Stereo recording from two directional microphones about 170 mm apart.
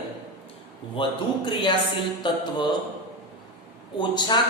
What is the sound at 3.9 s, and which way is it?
Speech, 25° left (ahead or behind).